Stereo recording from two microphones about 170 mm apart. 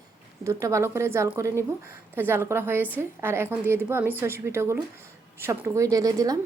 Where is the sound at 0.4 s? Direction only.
20° right (ahead or behind).